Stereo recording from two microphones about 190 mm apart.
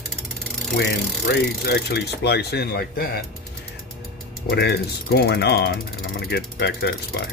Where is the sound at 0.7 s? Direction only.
60° left (ahead or behind).